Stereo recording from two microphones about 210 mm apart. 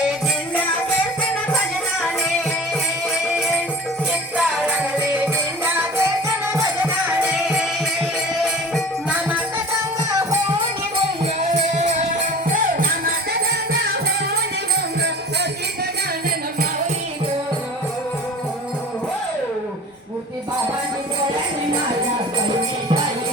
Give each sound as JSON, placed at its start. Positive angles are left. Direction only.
{"t": 4.4, "sound": "music", "side_deg": -5}
{"t": 8.7, "sound": "music", "side_deg": -5}
{"t": 11.3, "sound": "music", "side_deg": -35}